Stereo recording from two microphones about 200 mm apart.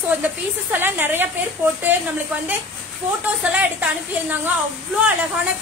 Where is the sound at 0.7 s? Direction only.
10° right (ahead or behind).